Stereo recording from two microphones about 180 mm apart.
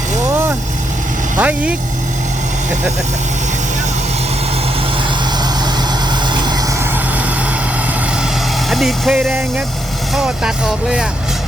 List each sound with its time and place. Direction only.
1.4 s speech: 10° right (ahead or behind)
6.3 s vehicle: 25° right (ahead or behind)
8.7 s speech: centre (ahead or behind)